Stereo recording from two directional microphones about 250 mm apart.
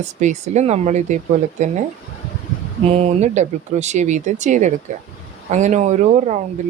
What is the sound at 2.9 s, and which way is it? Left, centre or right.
Speech, right.